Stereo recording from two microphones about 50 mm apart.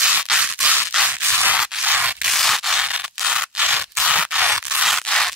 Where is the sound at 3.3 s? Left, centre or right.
Centre.